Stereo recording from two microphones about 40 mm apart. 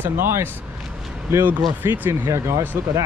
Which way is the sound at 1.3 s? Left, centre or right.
Right.